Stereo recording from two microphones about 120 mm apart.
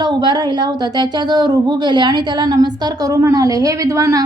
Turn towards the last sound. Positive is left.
turn(degrees=-30)  # may be behind; listen again after turning